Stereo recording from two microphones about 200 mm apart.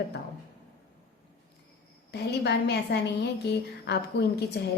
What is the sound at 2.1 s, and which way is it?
A woman's voice, 55° left (ahead or behind).